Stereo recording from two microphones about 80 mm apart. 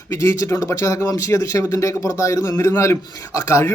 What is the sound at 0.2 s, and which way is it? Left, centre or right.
A man's voice, left.